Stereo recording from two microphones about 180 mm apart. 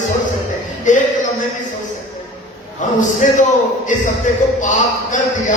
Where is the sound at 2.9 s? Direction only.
45° left (ahead or behind).